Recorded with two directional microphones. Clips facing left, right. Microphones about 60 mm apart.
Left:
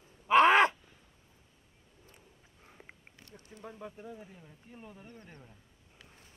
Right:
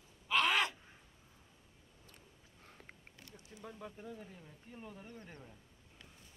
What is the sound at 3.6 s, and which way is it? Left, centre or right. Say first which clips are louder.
Speech: left 3 dB; centre.